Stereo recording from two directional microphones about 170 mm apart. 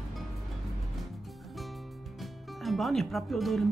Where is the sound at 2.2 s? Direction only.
Centre (ahead or behind).